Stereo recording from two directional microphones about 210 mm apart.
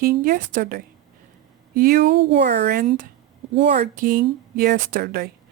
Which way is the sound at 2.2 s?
55° right (ahead or behind).